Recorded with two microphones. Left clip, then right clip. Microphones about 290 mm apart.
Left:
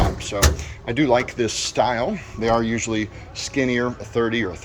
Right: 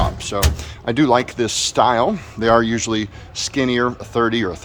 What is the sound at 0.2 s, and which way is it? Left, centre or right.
Speech, centre.